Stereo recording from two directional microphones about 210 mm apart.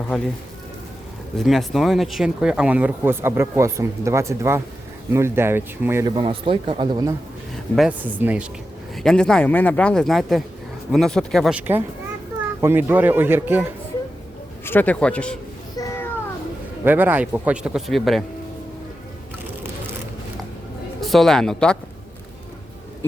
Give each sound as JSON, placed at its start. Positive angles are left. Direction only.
{"t": 1.4, "sound": "speech", "side_deg": 0}
{"t": 7.8, "sound": "speech", "side_deg": -5}
{"t": 9.0, "sound": "speech", "side_deg": 5}
{"t": 14.6, "sound": "a man's voice", "side_deg": 10}
{"t": 15.7, "sound": "a sound", "side_deg": 15}
{"t": 16.8, "sound": "speech", "side_deg": -10}
{"t": 21.0, "sound": "speech", "side_deg": 0}